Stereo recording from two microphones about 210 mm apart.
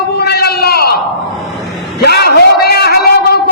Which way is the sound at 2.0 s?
50° left (ahead or behind).